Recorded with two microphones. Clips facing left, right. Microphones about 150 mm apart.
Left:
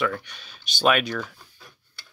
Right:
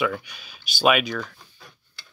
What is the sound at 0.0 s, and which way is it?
Speech, 5° right (ahead or behind).